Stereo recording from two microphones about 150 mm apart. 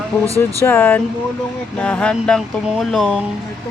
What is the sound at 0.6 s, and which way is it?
Speech, 15° left (ahead or behind).